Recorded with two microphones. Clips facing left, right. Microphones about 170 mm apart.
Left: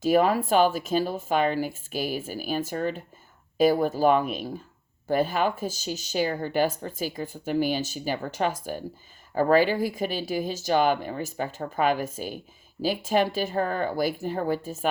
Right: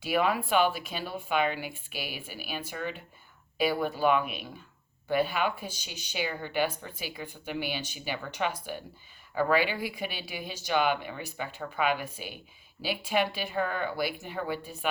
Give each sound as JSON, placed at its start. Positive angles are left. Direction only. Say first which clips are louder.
{"t": 0.0, "sound": "speech", "louder": "left 6 dB", "side_deg": 40}